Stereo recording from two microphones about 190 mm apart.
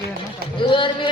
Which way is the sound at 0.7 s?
25° left (ahead or behind).